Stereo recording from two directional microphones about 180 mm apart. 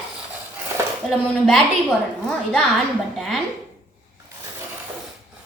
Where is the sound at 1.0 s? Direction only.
Centre (ahead or behind).